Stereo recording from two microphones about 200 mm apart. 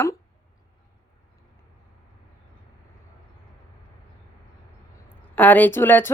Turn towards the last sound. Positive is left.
turn(degrees=10)  # may be behind; listen again after turning